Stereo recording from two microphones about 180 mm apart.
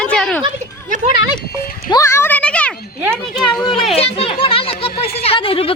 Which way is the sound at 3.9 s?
30° left (ahead or behind).